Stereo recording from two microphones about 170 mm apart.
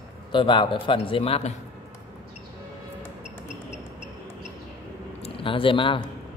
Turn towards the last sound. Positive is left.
turn(degrees=30)  # may be behind; listen again after turning